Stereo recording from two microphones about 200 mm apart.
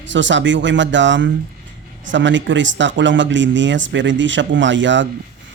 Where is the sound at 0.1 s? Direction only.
65° right (ahead or behind).